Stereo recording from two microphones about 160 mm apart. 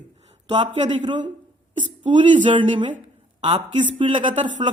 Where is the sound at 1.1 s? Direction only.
30° right (ahead or behind).